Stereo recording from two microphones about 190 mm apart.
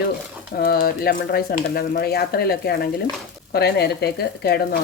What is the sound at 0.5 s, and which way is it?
Speech, 50° left (ahead or behind).